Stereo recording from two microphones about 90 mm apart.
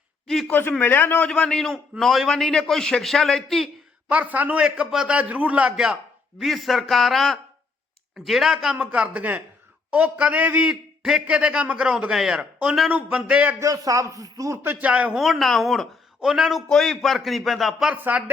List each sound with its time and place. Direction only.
0.3 s speech: 5° left (ahead or behind)
0.7 s a man's voice: 20° left (ahead or behind); by 3.7 s 5° left (ahead or behind)
4.1 s a man's voice: 20° right (ahead or behind)
4.6 s a man's voice: 10° right (ahead or behind)
6.4 s a man's voice: centre (ahead or behind)
8.5 s a man's voice: 15° right (ahead or behind)
13.6 s speech: 40° right (ahead or behind)
14.6 s a man's voice: 20° right (ahead or behind)
15.2 s a man's voice: centre (ahead or behind)
17.9 s speech: 20° right (ahead or behind)